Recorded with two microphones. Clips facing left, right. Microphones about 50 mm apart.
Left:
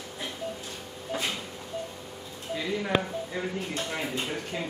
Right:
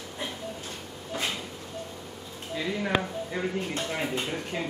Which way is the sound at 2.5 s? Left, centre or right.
Centre.